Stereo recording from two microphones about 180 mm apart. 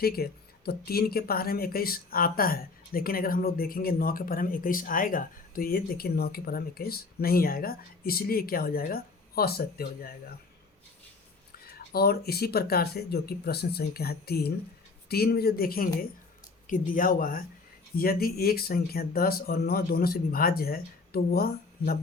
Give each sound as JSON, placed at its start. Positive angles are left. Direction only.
{"t": 0.0, "sound": "speech", "side_deg": 60}
{"t": 11.9, "sound": "speech", "side_deg": 60}